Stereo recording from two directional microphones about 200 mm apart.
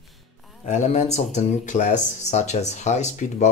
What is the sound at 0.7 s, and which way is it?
Speech, 35° left (ahead or behind).